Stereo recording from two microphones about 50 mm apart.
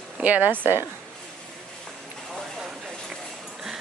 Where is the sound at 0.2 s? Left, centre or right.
Right.